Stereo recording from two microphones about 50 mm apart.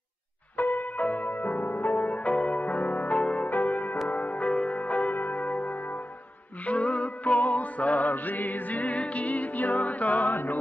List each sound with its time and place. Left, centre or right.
0.6 s music: left
5.1 s church bell: left
6.6 s music: left
10.3 s music: left